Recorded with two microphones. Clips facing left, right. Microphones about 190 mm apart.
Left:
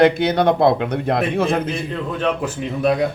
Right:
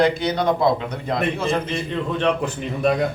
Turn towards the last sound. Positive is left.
turn(degrees=0)  # may be behind; listen again after turning